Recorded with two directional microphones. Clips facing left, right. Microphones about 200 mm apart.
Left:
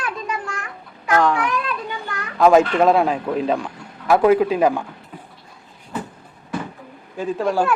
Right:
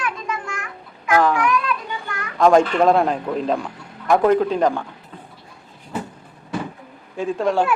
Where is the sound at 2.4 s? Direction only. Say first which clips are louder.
Left 1 dB; 5° left (ahead or behind).